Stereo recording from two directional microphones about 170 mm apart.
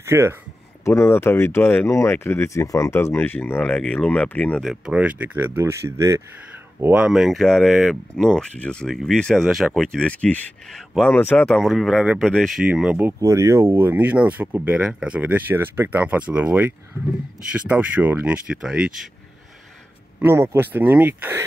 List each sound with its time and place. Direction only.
0.0 s speech: 15° right (ahead or behind)
0.8 s speech: 15° left (ahead or behind); by 13.1 s 5° right (ahead or behind)
13.2 s speech: 20° right (ahead or behind)
20.2 s speech: 15° right (ahead or behind)